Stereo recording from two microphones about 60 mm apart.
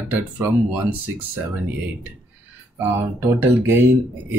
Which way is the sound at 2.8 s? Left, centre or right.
Right.